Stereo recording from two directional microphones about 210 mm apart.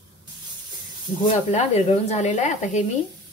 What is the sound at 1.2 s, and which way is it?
Speech, 35° left (ahead or behind).